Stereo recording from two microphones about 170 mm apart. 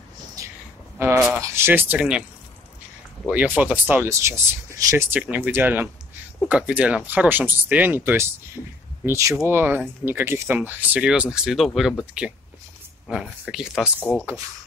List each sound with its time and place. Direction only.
0.4 s a sound: 20° right (ahead or behind)
0.9 s speech: 15° right (ahead or behind)
3.3 s speech: 10° right (ahead or behind)